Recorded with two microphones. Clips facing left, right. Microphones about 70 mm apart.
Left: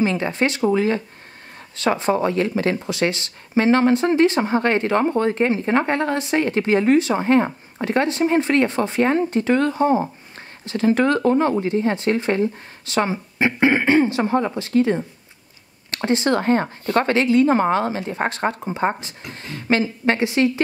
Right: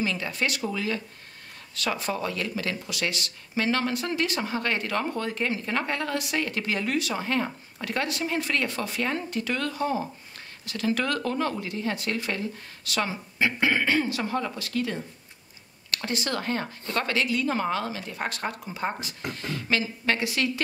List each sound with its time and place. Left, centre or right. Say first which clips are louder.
0.0 s speech: left 8 dB; left